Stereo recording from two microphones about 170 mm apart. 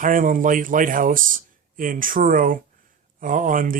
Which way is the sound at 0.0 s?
50° right (ahead or behind).